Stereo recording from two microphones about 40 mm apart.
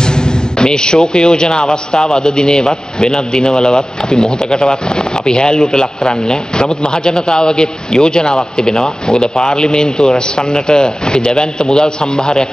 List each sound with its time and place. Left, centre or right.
0.0 s a man's voice: left